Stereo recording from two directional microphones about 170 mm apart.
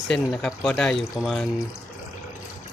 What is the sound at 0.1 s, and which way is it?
Speech, centre (ahead or behind).